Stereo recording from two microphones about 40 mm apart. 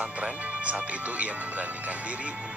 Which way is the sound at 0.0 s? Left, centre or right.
Right.